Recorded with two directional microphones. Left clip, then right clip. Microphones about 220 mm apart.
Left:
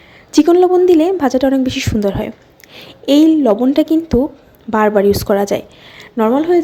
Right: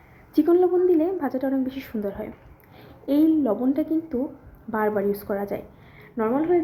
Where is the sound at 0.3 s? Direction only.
40° left (ahead or behind).